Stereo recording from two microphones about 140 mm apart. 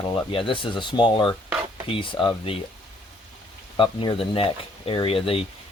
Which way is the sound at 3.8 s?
35° left (ahead or behind).